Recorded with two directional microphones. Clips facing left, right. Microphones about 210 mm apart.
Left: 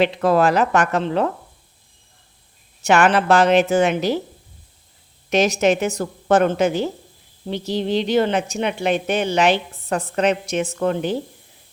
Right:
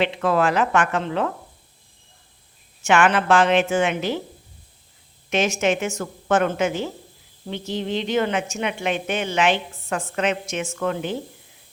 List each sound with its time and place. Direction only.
0.0 s a woman's voice: 40° left (ahead or behind)
2.8 s a woman's voice: 40° left (ahead or behind)
5.3 s a woman's voice: 40° left (ahead or behind)